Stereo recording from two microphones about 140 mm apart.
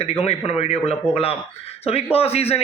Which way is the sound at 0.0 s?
45° left (ahead or behind).